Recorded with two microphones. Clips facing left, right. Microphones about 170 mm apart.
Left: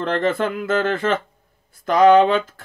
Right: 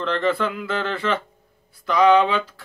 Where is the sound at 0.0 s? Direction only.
45° left (ahead or behind).